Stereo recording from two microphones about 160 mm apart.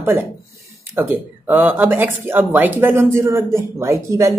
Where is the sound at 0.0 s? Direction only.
15° right (ahead or behind).